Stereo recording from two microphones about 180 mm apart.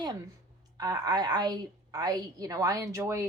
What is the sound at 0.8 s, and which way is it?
A woman's voice, 20° right (ahead or behind).